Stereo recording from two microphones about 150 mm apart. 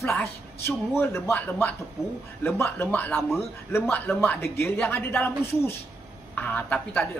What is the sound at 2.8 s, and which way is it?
A man's voice, 10° left (ahead or behind).